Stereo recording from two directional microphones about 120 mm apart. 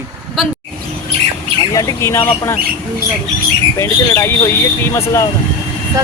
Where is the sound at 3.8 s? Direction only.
20° left (ahead or behind).